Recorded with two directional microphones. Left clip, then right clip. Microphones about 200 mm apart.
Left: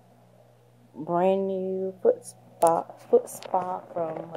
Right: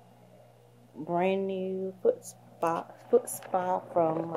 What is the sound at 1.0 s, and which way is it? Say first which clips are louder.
Speech: left 5 dB; 25° left (ahead or behind).